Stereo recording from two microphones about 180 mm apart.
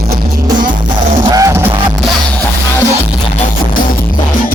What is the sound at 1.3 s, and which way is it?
Music, 20° right (ahead or behind).